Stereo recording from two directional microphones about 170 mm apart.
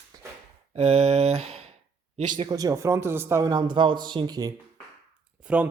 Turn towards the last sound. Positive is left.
turn(degrees=-5)  # may be behind; listen again after turning